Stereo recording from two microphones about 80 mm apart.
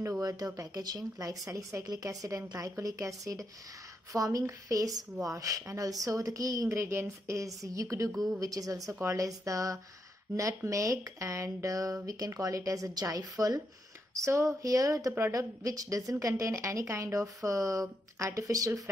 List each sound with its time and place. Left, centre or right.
0.2 s a woman's voice: right
14.2 s a woman's voice: right